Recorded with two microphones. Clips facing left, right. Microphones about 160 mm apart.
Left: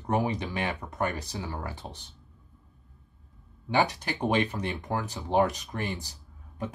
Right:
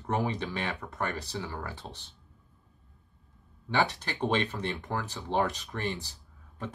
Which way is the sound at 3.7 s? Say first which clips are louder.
Left 3 dB; 15° left (ahead or behind).